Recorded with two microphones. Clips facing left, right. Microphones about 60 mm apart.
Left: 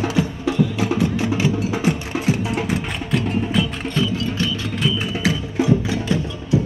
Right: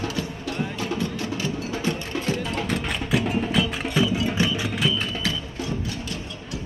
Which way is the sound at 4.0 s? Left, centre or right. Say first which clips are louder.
Even; centre.